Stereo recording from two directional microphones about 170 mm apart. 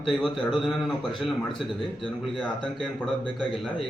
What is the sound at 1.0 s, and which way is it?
Speech, 30° left (ahead or behind).